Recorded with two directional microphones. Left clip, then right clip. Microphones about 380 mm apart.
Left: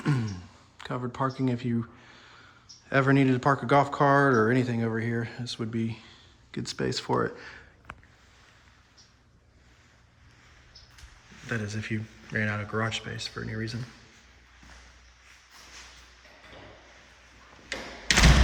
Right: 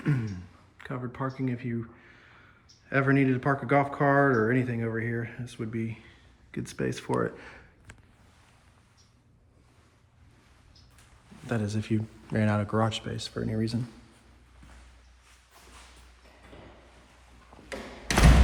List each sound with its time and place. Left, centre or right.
0.0 s clicking: centre
0.8 s speech: centre
11.4 s speech: centre